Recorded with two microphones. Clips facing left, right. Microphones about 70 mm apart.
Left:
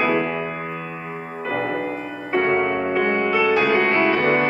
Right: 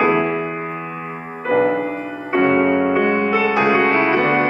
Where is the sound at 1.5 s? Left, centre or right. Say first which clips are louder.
Right 8 dB; centre.